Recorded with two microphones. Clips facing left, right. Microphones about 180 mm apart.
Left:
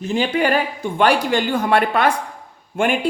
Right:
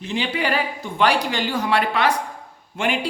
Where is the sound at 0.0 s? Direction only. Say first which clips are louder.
Left 5 dB; 45° left (ahead or behind).